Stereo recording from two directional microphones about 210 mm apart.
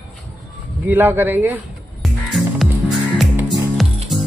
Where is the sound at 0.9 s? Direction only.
10° right (ahead or behind).